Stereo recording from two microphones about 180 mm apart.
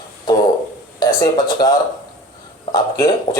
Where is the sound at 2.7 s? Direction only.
20° left (ahead or behind).